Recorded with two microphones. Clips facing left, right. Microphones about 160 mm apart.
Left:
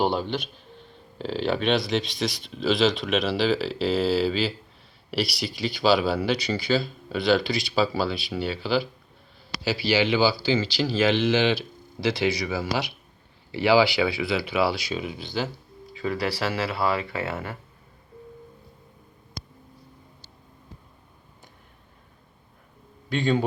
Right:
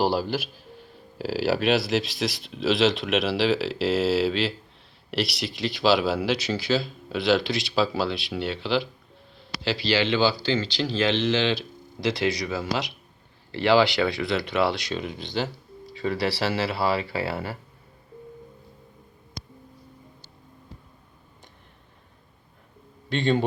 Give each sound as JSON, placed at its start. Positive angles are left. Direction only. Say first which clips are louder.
{"t": 0.0, "sound": "speech", "louder": "right 1 dB", "side_deg": -5}
{"t": 16.0, "sound": "speech", "louder": "right 1 dB", "side_deg": -30}
{"t": 23.1, "sound": "speech", "louder": "even", "side_deg": 0}